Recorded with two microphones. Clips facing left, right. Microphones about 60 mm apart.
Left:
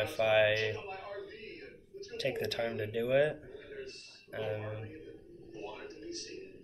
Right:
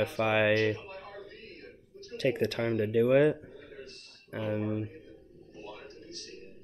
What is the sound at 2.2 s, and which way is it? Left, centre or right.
Speech, right.